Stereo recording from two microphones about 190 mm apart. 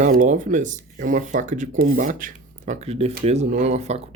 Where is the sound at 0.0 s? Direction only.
45° right (ahead or behind).